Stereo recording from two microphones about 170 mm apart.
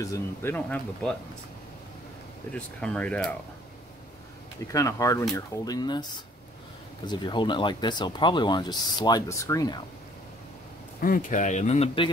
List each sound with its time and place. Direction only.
0.0 s speech: 15° left (ahead or behind)
2.5 s speech: 5° left (ahead or behind)
4.7 s speech: 20° left (ahead or behind)
11.0 s speech: 55° left (ahead or behind); by 12.1 s 35° left (ahead or behind)